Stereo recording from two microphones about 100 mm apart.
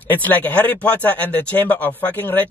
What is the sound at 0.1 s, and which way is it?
Speech, 15° left (ahead or behind).